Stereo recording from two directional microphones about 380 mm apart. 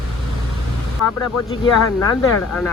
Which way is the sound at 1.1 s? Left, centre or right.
Left.